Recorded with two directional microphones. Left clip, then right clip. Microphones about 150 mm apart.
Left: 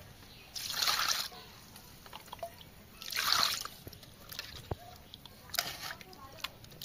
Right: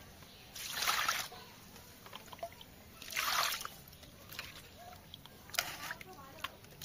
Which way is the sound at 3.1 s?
Centre (ahead or behind).